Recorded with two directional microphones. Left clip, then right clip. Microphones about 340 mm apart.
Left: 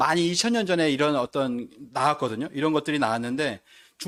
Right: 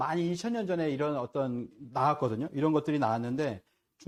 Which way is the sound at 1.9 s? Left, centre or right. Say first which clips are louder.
Left 4 dB; left.